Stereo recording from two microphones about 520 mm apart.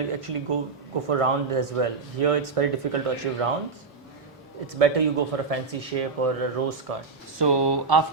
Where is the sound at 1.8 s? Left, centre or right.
Right.